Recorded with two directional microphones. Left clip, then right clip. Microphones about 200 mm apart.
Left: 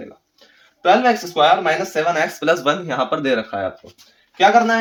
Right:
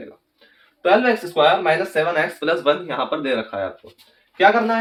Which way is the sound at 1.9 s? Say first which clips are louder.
Left 1 dB; 45° left (ahead or behind).